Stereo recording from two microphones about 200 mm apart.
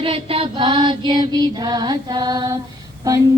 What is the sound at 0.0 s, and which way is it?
Music, 30° right (ahead or behind).